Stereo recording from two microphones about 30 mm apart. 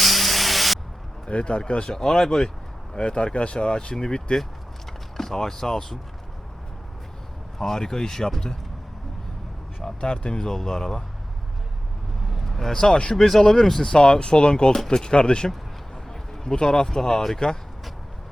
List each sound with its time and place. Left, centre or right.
0.0 s spray: centre
1.3 s speech: left
2.0 s speech: centre
3.0 s speech: left; by 5.8 s centre
7.6 s speech: centre
10.0 s speech: left
10.3 s speech: centre
12.5 s vehicle: centre
12.7 s speech: left
13.1 s speech: centre
13.9 s speech: left